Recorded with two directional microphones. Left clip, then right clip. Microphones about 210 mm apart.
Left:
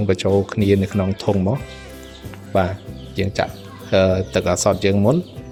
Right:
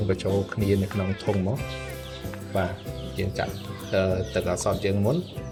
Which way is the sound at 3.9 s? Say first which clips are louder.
Left 9 dB; 50° left (ahead or behind).